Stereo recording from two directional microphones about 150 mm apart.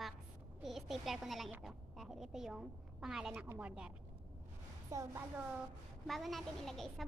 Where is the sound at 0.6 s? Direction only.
Centre (ahead or behind).